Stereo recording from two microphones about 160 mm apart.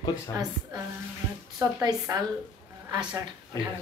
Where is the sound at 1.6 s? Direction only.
25° right (ahead or behind).